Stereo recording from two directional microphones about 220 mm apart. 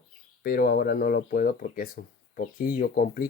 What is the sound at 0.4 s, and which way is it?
Speech, 40° left (ahead or behind).